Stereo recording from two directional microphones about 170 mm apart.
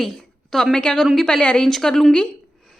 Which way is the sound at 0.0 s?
Centre (ahead or behind).